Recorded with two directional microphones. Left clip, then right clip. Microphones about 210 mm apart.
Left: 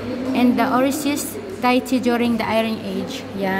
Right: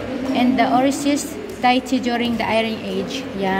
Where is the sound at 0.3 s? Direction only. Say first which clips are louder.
Right 1 dB; 25° left (ahead or behind).